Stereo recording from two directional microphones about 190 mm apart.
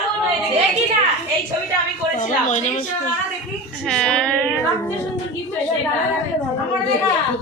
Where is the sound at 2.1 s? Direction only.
40° left (ahead or behind).